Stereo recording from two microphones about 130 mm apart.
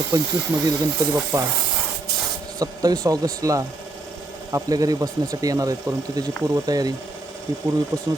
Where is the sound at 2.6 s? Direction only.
25° right (ahead or behind).